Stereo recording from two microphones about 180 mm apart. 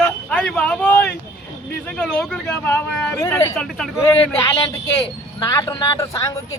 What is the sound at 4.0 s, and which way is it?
Speech, 15° left (ahead or behind).